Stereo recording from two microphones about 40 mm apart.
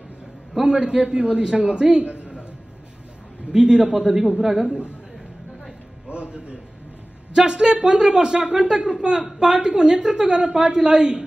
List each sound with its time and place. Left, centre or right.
0.7 s a woman's voice: right
3.5 s a man's voice: centre
6.0 s a man's voice: right